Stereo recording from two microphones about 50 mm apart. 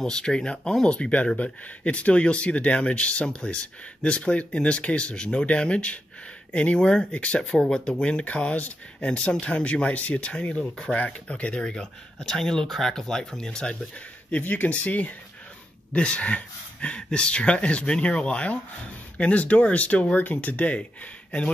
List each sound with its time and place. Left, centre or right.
0.0 s speech: centre
7.4 s speech: centre
8.0 s speech: left
11.6 s speech: centre
14.3 s speech: left